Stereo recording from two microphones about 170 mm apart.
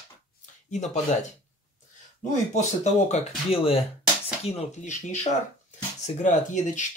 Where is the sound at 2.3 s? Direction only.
45° left (ahead or behind).